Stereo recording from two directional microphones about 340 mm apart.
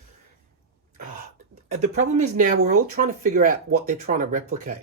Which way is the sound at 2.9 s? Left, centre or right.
Right.